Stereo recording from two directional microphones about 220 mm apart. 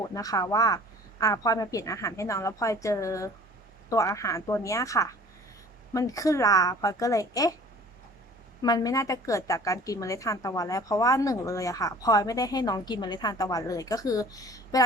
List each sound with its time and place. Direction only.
0.1 s a woman's voice: 15° left (ahead or behind)
8.6 s a woman's voice: 15° left (ahead or behind)